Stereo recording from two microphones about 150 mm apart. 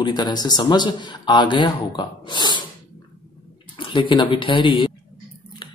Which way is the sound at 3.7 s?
30° left (ahead or behind).